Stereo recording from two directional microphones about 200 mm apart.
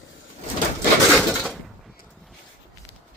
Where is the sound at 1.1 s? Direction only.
Centre (ahead or behind).